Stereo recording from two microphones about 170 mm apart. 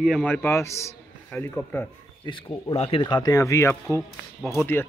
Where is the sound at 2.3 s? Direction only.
30° left (ahead or behind).